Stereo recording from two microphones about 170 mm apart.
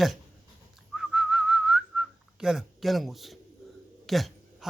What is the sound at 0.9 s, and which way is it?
Whistling, 5° right (ahead or behind).